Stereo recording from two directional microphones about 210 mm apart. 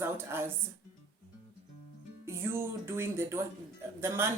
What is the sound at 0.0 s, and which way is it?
Speech, 10° right (ahead or behind).